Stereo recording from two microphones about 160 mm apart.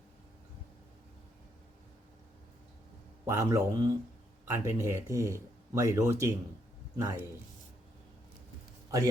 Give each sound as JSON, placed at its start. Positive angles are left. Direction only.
{"t": 3.2, "sound": "speech", "side_deg": -20}